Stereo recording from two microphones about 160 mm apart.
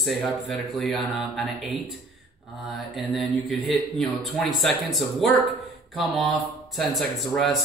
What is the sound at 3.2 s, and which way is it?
Speech, centre (ahead or behind).